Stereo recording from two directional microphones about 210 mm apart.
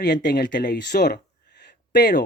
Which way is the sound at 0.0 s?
50° left (ahead or behind).